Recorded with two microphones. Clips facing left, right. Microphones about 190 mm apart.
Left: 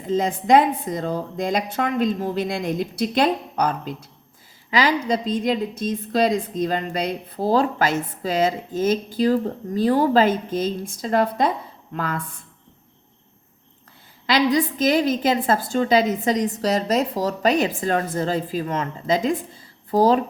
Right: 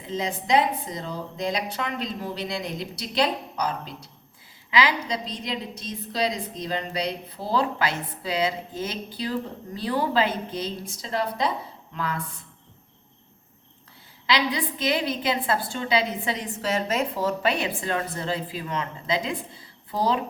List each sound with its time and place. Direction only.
0.0 s a woman's voice: 50° left (ahead or behind)
14.3 s a woman's voice: 45° left (ahead or behind)